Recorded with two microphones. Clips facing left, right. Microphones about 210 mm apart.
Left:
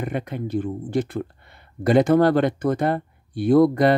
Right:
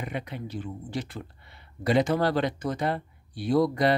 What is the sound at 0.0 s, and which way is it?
Speech, 50° left (ahead or behind).